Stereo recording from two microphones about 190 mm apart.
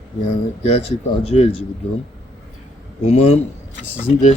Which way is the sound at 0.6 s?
35° left (ahead or behind).